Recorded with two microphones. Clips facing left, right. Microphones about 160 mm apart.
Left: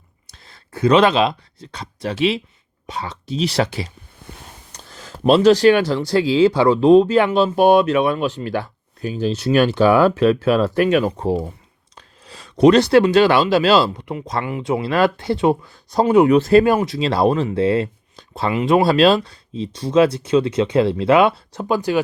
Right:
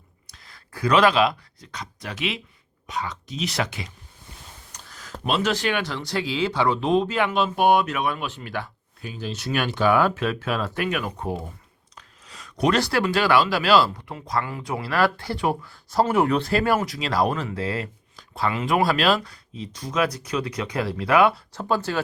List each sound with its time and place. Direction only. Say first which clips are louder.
0.3 s speech: left 4 dB; 25° left (ahead or behind)
4.9 s a sound: left 7 dB; 30° left (ahead or behind)
5.2 s speech: left 12 dB; 35° left (ahead or behind); by 22.0 s 15° left (ahead or behind)